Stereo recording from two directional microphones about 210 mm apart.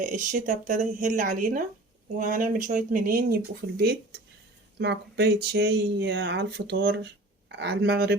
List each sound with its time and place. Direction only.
0.0 s speech: 40° right (ahead or behind)